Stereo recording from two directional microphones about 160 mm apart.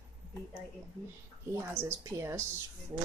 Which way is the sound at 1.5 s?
15° right (ahead or behind).